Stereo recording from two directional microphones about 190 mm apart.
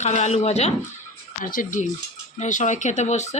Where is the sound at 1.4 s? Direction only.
45° left (ahead or behind).